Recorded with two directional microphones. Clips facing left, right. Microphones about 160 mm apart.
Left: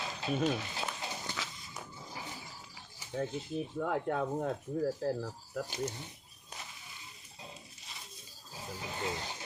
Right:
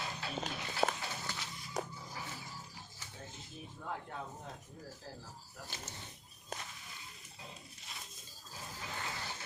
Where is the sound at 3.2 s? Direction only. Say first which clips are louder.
Left 16 dB; 70° left (ahead or behind).